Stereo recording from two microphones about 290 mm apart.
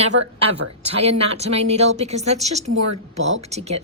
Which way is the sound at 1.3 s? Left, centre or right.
Right.